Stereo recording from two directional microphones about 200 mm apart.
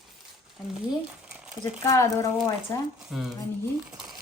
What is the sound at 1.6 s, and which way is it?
Speech, 15° left (ahead or behind).